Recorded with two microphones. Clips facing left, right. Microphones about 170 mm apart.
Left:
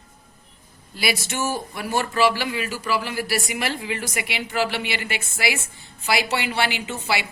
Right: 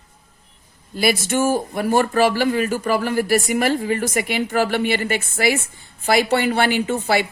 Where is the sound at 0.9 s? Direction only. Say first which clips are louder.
Right 7 dB; 50° right (ahead or behind).